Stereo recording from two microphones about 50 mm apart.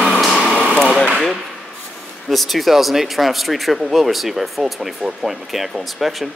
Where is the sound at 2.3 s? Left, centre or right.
Centre.